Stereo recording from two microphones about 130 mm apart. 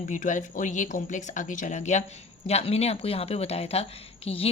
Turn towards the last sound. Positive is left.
turn(degrees=50)  # may be behind; listen again after turning